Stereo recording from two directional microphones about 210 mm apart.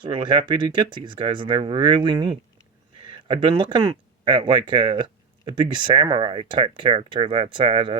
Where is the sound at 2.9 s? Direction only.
25° right (ahead or behind).